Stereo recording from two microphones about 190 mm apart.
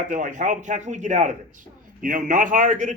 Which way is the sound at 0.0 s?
40° right (ahead or behind).